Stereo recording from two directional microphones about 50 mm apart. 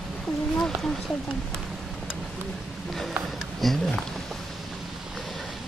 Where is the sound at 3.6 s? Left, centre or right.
Centre.